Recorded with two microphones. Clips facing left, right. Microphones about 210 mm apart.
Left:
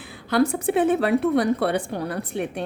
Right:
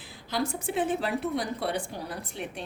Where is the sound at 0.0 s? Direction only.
60° left (ahead or behind).